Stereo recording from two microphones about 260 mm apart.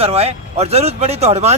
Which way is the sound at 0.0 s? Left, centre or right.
Right.